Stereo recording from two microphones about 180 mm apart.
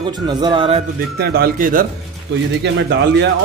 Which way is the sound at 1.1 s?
60° right (ahead or behind).